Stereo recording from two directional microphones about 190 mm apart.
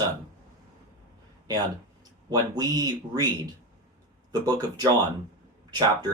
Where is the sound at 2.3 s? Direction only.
20° right (ahead or behind).